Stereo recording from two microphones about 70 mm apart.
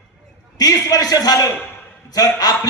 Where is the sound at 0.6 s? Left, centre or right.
Left.